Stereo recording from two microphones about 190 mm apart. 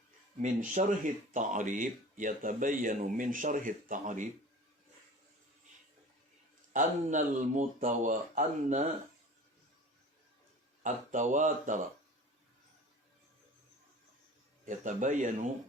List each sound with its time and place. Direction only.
0.4 s speech: 40° right (ahead or behind)
6.7 s speech: 40° right (ahead or behind)
10.8 s speech: 40° right (ahead or behind)
14.6 s speech: 40° right (ahead or behind)